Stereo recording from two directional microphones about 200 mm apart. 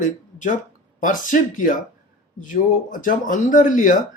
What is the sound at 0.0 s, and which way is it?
Speech, 40° left (ahead or behind).